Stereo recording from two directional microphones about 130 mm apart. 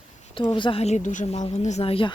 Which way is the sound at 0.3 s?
40° left (ahead or behind).